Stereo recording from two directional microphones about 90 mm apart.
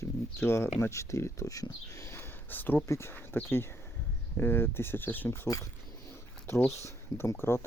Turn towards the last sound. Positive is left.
turn(degrees=30)  # may be behind; listen again after turning